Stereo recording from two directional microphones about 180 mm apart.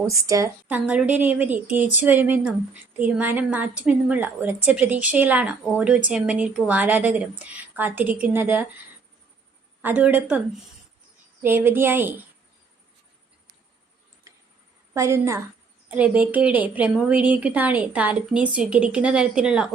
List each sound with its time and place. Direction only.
0.0 s a woman's voice: 20° right (ahead or behind)
9.8 s a woman's voice: 10° right (ahead or behind)
11.4 s a woman's voice: 10° right (ahead or behind)
14.9 s a woman's voice: 15° right (ahead or behind)